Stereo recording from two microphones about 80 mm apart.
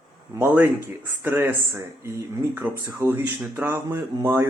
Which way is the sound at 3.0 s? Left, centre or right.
Right.